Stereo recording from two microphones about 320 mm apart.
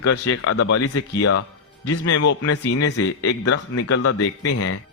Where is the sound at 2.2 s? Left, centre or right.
Left.